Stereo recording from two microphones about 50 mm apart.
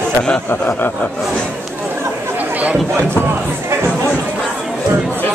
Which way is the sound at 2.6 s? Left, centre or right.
Right.